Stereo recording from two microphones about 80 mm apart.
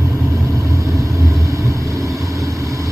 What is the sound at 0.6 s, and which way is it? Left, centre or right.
Vehicle, right.